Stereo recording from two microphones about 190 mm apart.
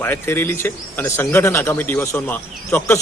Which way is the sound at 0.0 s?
10° left (ahead or behind).